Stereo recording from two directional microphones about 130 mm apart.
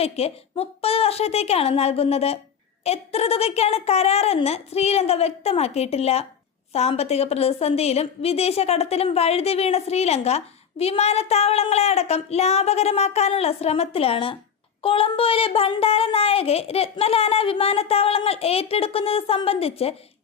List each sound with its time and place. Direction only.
0.0 s a woman's voice: 50° left (ahead or behind)